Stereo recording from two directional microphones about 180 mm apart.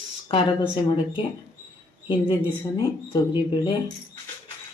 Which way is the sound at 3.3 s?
25° left (ahead or behind).